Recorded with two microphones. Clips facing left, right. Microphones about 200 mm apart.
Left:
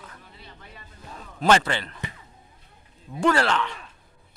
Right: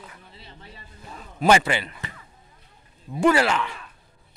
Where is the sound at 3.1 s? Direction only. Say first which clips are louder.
Right 2 dB; 10° right (ahead or behind).